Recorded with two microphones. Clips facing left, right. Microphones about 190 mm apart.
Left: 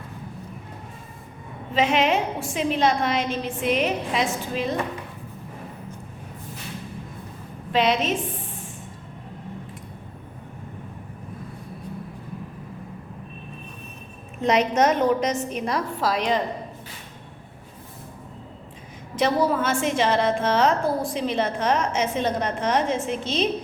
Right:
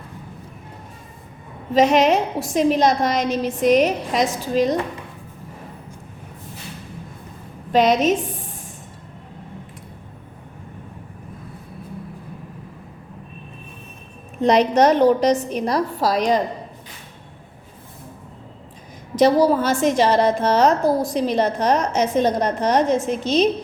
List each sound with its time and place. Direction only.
1.7 s a woman's voice: 40° right (ahead or behind)
7.7 s a woman's voice: 40° right (ahead or behind)
14.4 s a woman's voice: 35° right (ahead or behind)
19.1 s a woman's voice: 40° right (ahead or behind)